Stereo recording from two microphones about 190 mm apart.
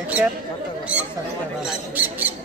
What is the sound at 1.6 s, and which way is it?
Speech, 5° right (ahead or behind).